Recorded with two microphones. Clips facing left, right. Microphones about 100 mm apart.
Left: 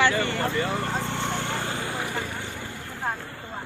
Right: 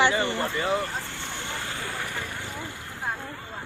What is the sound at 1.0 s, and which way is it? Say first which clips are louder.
Vehicle: left 8 dB; 75° left (ahead or behind).